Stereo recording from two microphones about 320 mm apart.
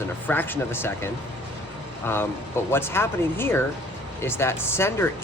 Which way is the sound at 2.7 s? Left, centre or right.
Centre.